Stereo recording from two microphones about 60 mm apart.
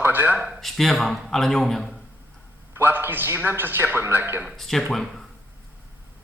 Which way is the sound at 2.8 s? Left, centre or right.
Right.